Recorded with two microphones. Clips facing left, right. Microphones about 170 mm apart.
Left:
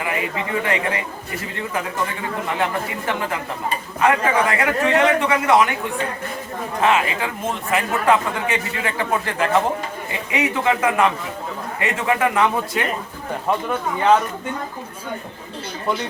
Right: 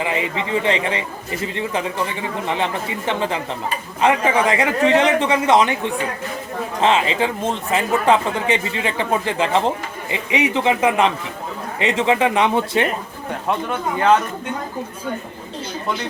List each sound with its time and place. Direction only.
0.0 s speech: 25° right (ahead or behind)
3.1 s speech: 25° right (ahead or behind)